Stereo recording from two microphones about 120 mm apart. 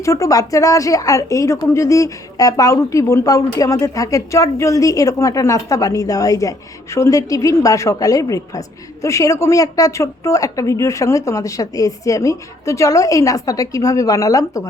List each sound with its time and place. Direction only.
0.0 s a woman's voice: 25° left (ahead or behind)